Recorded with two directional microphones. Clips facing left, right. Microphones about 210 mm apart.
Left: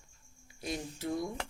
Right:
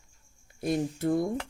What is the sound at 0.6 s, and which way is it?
Speech, 50° right (ahead or behind).